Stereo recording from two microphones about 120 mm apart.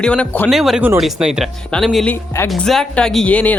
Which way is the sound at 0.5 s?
5° right (ahead or behind).